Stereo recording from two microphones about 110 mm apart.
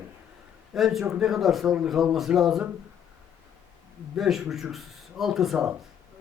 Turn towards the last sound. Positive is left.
turn(degrees=-5)  # may be behind; listen again after turning